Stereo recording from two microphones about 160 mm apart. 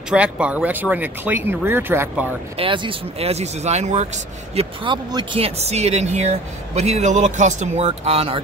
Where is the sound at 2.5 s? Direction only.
30° right (ahead or behind).